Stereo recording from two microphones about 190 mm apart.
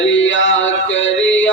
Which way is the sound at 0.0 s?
80° left.